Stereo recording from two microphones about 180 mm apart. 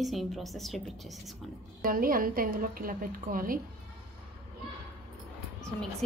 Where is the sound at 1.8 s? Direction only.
50° right (ahead or behind).